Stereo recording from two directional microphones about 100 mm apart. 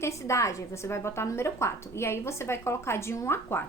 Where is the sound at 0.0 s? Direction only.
30° left (ahead or behind).